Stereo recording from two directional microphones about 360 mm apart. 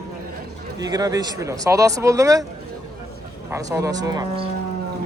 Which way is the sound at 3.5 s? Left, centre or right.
Centre.